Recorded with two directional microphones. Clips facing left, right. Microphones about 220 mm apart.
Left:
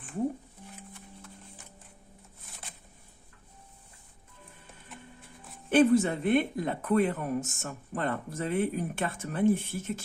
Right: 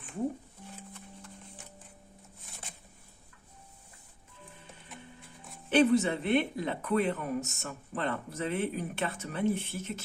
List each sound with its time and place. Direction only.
5.7 s speech: 50° left (ahead or behind)